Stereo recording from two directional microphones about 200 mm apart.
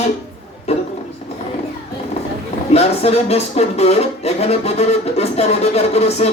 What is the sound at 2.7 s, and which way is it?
Speech, 30° left (ahead or behind).